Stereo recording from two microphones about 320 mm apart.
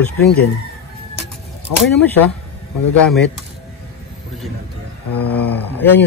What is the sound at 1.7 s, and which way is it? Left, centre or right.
Speech, left.